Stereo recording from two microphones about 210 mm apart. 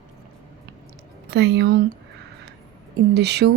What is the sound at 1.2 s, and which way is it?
Speech, 55° right (ahead or behind).